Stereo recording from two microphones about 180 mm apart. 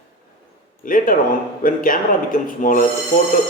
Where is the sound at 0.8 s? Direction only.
50° left (ahead or behind).